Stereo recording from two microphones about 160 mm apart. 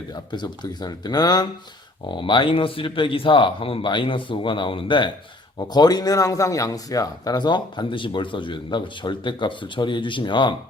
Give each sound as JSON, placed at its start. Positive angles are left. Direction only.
{"t": 0.1, "sound": "a man's voice", "side_deg": 25}